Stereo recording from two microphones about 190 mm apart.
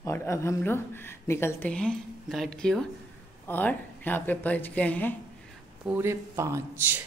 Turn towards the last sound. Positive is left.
turn(degrees=-15)  # may be behind; listen again after turning